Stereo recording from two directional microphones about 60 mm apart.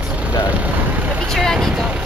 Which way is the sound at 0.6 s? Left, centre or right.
Right.